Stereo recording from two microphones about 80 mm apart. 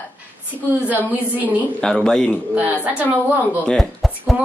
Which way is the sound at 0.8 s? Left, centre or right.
Right.